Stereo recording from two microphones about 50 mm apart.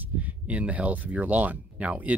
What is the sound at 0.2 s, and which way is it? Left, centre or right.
Speech, right.